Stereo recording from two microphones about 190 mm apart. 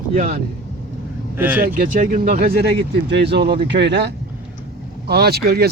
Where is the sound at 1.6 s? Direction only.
50° right (ahead or behind).